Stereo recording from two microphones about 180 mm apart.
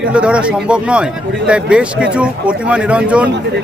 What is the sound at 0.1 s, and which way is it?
Speech, 5° right (ahead or behind).